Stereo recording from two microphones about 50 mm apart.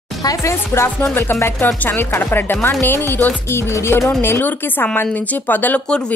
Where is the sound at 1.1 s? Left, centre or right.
Left.